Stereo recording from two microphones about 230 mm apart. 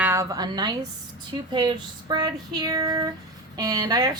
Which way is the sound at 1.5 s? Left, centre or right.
Centre.